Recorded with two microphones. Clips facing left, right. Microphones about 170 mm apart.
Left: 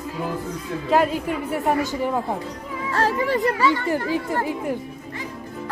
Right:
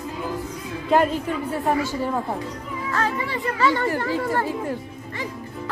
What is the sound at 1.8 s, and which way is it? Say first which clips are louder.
Speech: left 1 dB; 15° left (ahead or behind).